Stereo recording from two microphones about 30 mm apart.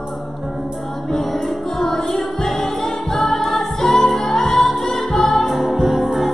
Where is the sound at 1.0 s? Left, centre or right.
Centre.